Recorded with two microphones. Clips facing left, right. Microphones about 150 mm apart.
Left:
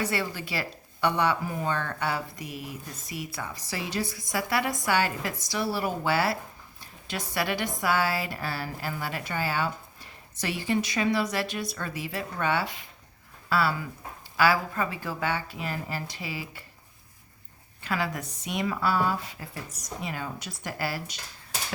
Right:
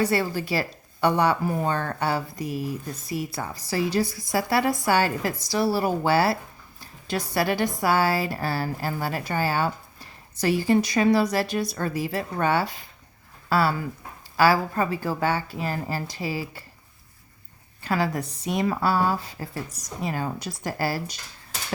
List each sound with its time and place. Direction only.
0.0 s speech: 40° right (ahead or behind)
17.8 s speech: 35° right (ahead or behind)